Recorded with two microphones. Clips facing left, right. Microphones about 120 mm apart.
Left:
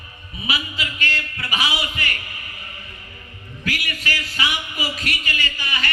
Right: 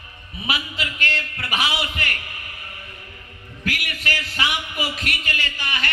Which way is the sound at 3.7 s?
55° right (ahead or behind).